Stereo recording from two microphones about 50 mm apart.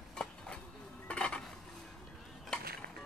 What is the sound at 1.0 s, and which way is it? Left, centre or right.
Cutlery, left.